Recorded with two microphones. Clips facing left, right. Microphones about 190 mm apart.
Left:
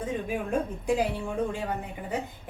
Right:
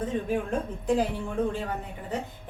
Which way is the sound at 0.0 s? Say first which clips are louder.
Right 2 dB; 10° left (ahead or behind).